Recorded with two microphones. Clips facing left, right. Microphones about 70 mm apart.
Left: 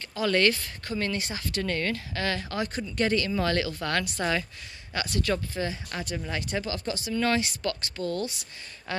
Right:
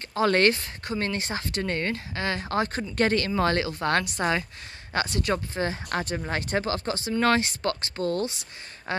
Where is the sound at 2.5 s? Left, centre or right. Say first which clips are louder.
Right 4 dB; right.